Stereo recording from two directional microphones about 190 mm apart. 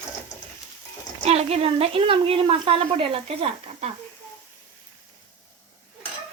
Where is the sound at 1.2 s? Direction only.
35° right (ahead or behind).